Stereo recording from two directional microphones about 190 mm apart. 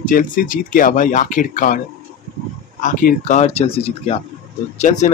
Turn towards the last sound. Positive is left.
turn(degrees=40)  # may be behind; listen again after turning